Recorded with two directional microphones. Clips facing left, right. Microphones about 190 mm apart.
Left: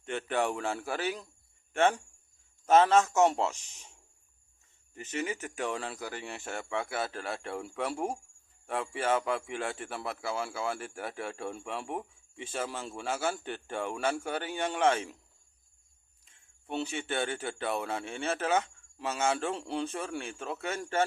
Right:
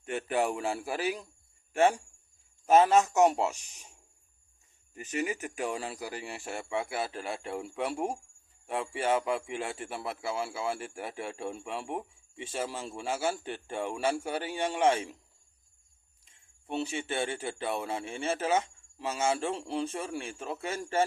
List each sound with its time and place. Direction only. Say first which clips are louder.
0.0 s speech: right 1 dB; 10° right (ahead or behind)
4.9 s speech: right 2 dB; 15° right (ahead or behind)
16.6 s speech: right 1 dB; 5° right (ahead or behind)